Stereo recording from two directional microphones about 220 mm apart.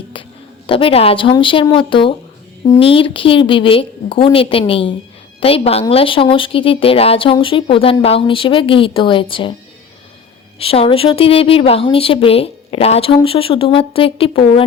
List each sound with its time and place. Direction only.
0.7 s a woman's voice: 25° left (ahead or behind)
10.6 s a woman's voice: 25° left (ahead or behind)